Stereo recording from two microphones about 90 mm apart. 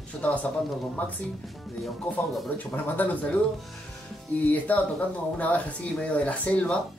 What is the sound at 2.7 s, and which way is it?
Speech, 20° left (ahead or behind).